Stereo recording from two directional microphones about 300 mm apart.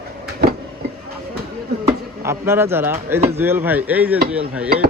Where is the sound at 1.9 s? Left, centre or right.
Centre.